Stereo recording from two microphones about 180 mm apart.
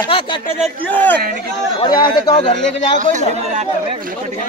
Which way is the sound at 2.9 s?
45° right (ahead or behind).